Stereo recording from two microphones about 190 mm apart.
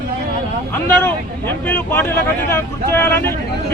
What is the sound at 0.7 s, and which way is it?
Speech, 10° left (ahead or behind).